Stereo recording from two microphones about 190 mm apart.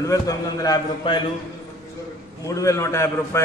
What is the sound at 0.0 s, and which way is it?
A man's voice, 20° left (ahead or behind).